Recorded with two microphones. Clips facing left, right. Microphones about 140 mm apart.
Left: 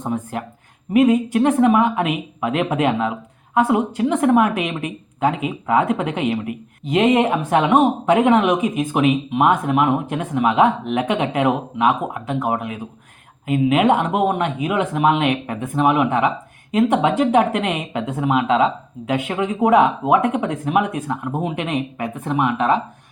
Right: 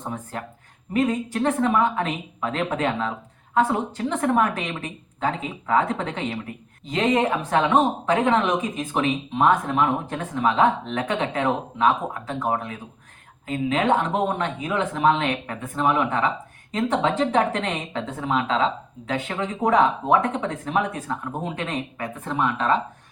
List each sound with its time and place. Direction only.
0.9 s speech: 15° left (ahead or behind)